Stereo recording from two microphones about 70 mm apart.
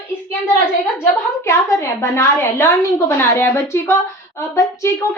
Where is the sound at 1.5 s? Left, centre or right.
Left.